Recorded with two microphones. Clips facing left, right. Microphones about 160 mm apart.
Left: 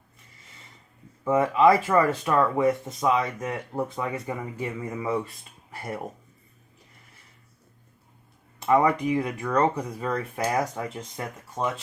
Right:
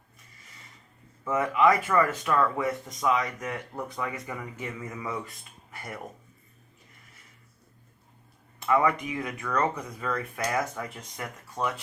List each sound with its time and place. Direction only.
1.3 s speech: 30° left (ahead or behind)
8.6 s speech: 35° left (ahead or behind)